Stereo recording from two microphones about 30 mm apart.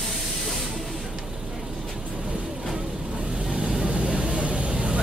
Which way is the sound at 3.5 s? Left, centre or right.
Right.